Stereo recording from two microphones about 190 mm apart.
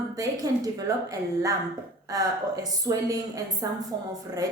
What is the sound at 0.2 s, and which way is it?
A woman's voice, 20° right (ahead or behind).